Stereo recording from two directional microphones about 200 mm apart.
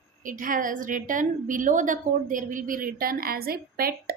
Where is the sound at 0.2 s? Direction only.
40° right (ahead or behind).